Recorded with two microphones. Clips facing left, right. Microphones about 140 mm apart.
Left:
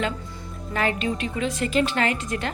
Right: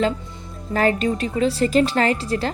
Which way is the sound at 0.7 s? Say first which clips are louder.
Right 6 dB; 40° right (ahead or behind).